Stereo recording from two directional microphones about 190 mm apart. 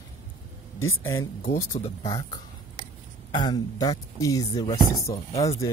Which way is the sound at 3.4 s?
20° left (ahead or behind).